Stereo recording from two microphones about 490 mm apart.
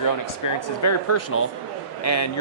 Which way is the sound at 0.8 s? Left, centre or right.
Left.